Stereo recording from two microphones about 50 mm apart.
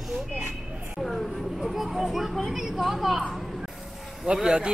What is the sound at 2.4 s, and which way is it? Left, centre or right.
Speech, centre.